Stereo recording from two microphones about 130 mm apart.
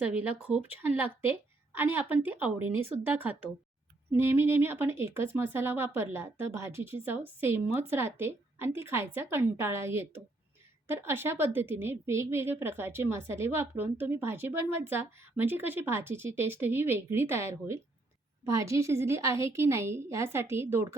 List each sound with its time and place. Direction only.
0.0 s a woman's voice: 10° right (ahead or behind)